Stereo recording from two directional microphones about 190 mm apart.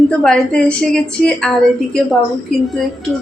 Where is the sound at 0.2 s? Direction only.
5° left (ahead or behind).